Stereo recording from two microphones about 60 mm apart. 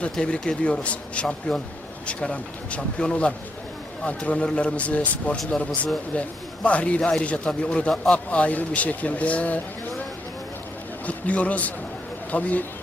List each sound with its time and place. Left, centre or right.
0.0 s speech: centre
11.0 s a man's voice: left